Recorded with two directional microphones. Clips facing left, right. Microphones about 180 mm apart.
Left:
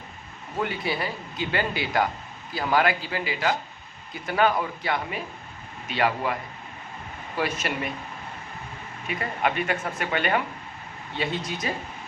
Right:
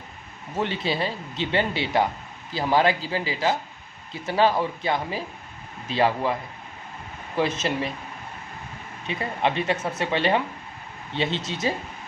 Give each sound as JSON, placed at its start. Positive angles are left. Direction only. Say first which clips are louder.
{"t": 0.6, "sound": "speech", "louder": "right 2 dB", "side_deg": -25}
{"t": 7.3, "sound": "speech", "louder": "right 4 dB", "side_deg": -25}
{"t": 9.0, "sound": "speech", "louder": "right 1 dB", "side_deg": -25}